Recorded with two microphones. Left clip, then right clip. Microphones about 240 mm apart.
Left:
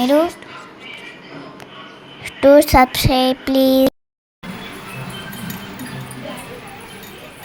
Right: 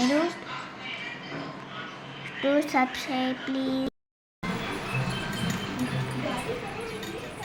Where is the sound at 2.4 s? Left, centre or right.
Left.